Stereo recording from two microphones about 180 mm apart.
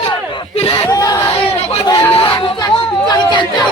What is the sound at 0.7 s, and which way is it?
Crowd, 20° left (ahead or behind).